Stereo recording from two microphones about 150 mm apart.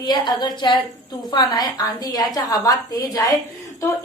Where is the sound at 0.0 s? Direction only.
30° left (ahead or behind).